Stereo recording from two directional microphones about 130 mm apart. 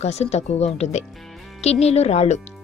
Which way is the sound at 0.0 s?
55° left (ahead or behind).